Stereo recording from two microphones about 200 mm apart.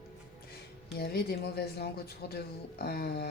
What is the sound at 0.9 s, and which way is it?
Speech, 55° left (ahead or behind).